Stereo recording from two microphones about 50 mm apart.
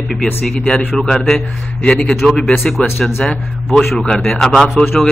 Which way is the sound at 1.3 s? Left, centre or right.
Left.